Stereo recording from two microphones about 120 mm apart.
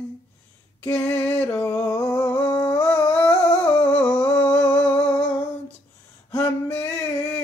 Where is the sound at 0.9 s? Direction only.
10° left (ahead or behind).